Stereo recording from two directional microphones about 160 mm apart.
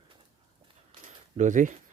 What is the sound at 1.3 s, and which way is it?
Speech, 50° right (ahead or behind).